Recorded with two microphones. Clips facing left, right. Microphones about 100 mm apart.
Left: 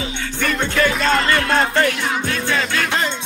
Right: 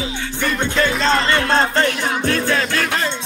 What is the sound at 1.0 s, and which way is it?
Music, 30° right (ahead or behind).